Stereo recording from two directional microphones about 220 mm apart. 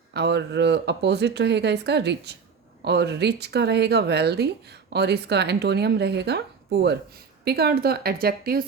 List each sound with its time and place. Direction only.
0.1 s speech: 50° right (ahead or behind)